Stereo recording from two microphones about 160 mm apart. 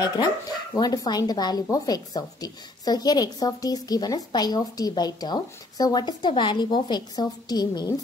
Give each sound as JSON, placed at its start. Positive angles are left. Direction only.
{"t": 0.7, "sound": "a woman's voice", "side_deg": 25}